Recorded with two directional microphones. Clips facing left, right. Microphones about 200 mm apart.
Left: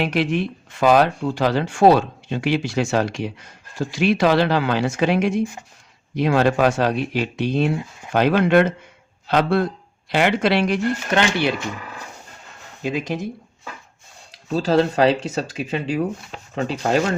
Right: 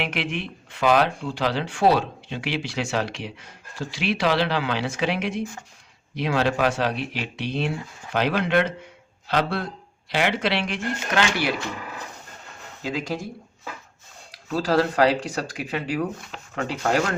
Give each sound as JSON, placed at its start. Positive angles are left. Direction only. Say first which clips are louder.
{"t": 0.0, "sound": "speech", "louder": "left 7 dB", "side_deg": 40}
{"t": 11.1, "sound": "speech", "louder": "left 2 dB", "side_deg": 25}
{"t": 12.8, "sound": "speech", "louder": "left 4 dB", "side_deg": 20}
{"t": 14.5, "sound": "speech", "louder": "left 3 dB", "side_deg": 25}